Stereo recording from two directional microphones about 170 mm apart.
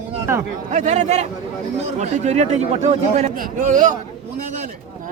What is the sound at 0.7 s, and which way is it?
Speech, 45° right (ahead or behind).